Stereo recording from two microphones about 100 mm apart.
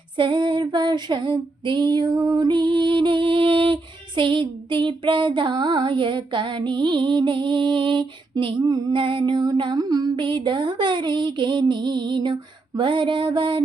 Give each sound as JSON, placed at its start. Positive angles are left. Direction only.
{"t": 0.2, "sound": "female singing", "side_deg": -55}
{"t": 10.2, "sound": "female singing", "side_deg": -55}